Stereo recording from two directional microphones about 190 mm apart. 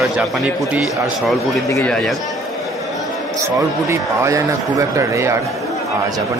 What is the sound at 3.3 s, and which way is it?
Speech, 15° right (ahead or behind).